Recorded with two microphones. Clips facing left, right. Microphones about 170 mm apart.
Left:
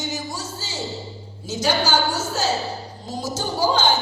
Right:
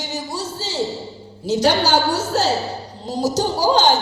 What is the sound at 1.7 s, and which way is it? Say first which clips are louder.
A woman's voice: right 3 dB; 35° right (ahead or behind).